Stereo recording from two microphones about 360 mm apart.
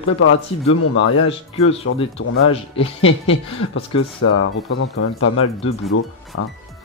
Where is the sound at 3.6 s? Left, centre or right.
Left.